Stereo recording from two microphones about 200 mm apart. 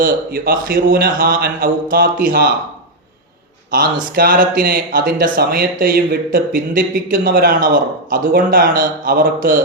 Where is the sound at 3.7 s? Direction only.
45° right (ahead or behind).